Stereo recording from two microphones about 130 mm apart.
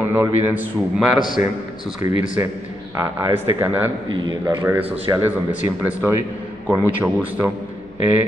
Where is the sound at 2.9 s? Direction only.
20° right (ahead or behind).